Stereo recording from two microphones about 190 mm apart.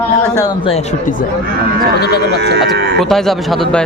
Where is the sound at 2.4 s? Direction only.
65° right (ahead or behind).